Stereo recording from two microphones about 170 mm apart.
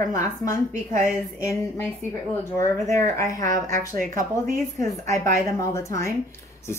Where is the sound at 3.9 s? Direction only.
50° right (ahead or behind).